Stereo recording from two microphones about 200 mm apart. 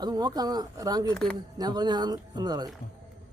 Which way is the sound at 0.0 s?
20° right (ahead or behind).